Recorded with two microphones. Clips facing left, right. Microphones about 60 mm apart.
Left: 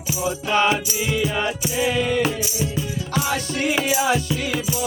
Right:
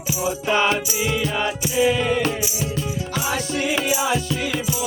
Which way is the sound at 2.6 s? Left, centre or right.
Centre.